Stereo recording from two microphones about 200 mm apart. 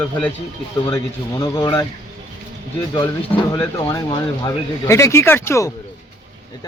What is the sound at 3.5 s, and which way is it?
Speech, 20° left (ahead or behind).